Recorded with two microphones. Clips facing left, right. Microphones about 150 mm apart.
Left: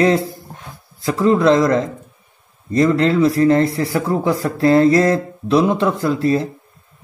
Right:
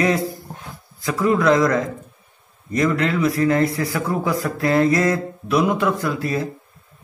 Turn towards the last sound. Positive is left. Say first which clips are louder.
# left 6 dB
turn(degrees=30)  # may be behind; listen again after turning